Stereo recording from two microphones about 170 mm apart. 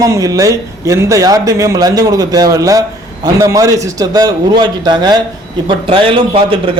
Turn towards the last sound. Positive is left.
turn(degrees=-30)  # may be behind; listen again after turning